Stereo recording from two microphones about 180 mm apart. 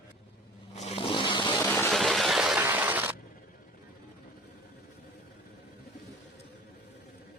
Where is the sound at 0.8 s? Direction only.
35° left (ahead or behind).